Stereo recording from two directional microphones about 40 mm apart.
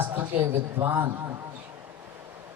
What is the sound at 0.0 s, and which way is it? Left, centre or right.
A woman's voice, right.